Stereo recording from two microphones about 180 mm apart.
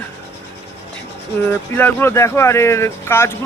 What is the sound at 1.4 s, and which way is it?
Speech, 10° left (ahead or behind).